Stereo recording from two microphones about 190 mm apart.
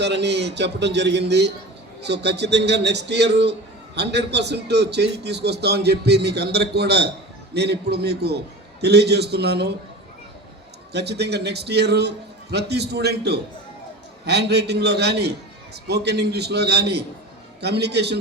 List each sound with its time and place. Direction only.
0.0 s a man's voice: 65° right (ahead or behind)
10.9 s a man's voice: 60° right (ahead or behind)